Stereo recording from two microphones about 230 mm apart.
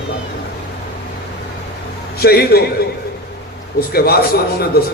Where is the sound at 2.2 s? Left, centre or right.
Left.